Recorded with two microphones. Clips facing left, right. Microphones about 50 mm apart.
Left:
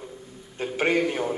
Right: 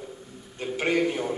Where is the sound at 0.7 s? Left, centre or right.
Left.